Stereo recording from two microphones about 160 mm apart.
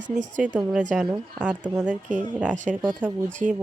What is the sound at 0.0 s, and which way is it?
Speech, 50° right (ahead or behind).